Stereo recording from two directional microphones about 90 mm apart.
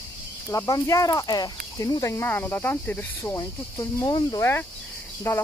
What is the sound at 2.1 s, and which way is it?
Speech, 20° left (ahead or behind).